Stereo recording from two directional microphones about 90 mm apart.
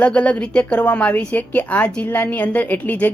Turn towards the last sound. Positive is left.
turn(degrees=20)  # may be behind; listen again after turning